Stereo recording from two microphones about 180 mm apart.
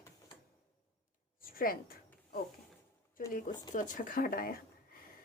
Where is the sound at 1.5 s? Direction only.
55° left (ahead or behind).